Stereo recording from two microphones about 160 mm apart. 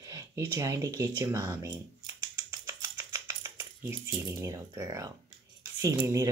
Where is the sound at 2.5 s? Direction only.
20° right (ahead or behind).